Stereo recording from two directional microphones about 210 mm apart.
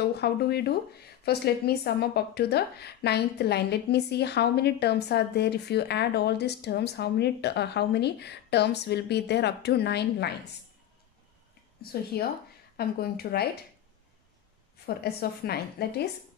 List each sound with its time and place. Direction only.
0.2 s a woman's voice: 50° left (ahead or behind)
11.8 s a woman's voice: 45° left (ahead or behind)
15.0 s a woman's voice: 50° left (ahead or behind)